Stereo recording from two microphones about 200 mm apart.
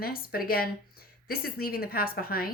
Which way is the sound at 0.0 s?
50° left (ahead or behind).